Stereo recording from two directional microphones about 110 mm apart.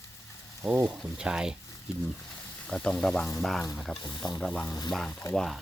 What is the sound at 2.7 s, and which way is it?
Speech, 5° left (ahead or behind).